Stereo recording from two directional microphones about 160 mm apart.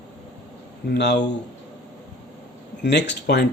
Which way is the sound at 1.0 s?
90° left.